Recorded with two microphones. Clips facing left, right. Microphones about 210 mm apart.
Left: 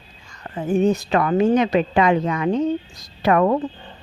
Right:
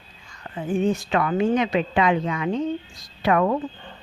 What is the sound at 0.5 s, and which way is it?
A woman's voice, 40° left (ahead or behind).